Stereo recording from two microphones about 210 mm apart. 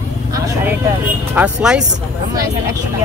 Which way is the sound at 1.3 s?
5° right (ahead or behind).